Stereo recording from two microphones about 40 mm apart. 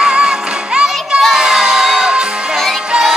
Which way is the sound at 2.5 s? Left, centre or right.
Centre.